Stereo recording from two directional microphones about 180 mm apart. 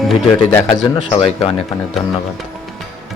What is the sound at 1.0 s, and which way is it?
Speech, 30° left (ahead or behind).